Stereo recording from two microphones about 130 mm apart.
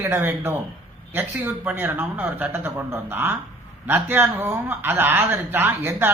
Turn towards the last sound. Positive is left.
turn(degrees=-15)  # may be behind; listen again after turning